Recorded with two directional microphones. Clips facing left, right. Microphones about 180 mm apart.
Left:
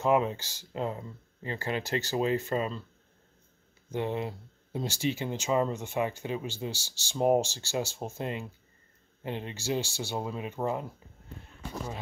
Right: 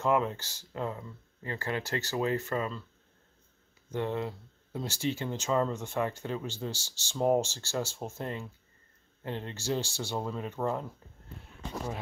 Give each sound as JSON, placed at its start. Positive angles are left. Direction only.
{"t": 0.0, "sound": "speech", "side_deg": 15}
{"t": 3.9, "sound": "speech", "side_deg": 15}